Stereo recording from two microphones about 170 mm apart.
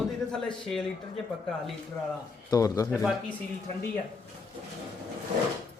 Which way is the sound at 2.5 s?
20° left (ahead or behind).